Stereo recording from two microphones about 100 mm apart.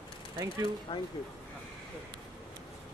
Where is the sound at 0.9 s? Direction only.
65° left (ahead or behind).